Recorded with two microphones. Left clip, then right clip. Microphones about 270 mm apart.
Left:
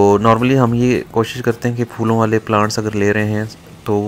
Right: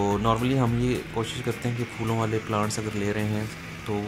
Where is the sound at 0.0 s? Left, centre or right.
Left.